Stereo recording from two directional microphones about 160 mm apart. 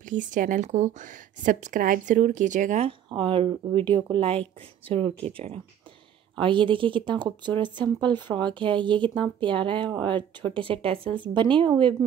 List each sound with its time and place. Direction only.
0.0 s a woman's voice: 55° right (ahead or behind); by 11.9 s 30° right (ahead or behind)